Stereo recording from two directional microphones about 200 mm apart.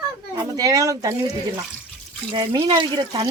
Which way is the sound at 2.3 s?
25° right (ahead or behind).